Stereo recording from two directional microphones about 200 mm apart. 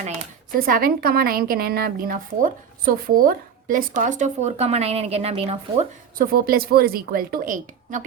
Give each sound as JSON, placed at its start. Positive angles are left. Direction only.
{"t": 0.6, "sound": "a woman's voice", "side_deg": -45}
{"t": 6.1, "sound": "a woman's voice", "side_deg": -45}